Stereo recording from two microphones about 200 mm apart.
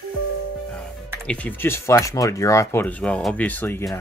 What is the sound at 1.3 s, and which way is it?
Speech, 5° left (ahead or behind).